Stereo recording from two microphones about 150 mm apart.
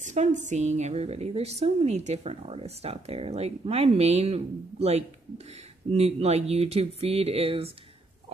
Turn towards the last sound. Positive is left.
turn(degrees=-40)  # may be behind; listen again after turning